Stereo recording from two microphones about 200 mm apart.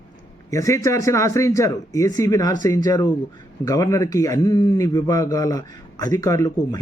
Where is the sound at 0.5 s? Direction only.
15° left (ahead or behind).